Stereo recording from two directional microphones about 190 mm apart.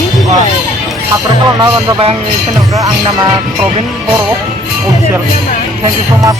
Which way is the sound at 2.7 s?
15° right (ahead or behind).